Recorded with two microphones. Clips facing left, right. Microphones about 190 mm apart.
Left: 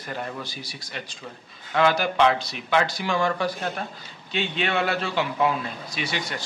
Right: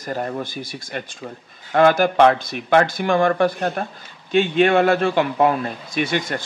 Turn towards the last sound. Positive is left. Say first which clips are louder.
# right 8 dB
turn(degrees=-50)  # may be behind; listen again after turning